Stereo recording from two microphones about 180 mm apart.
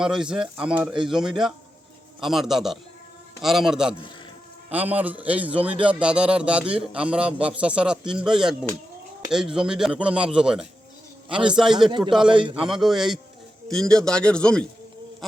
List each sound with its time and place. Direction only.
0.0 s a man's voice: 5° right (ahead or behind)
11.9 s a man's voice: 25° right (ahead or behind)
12.6 s a man's voice: centre (ahead or behind)
15.2 s a sound: centre (ahead or behind)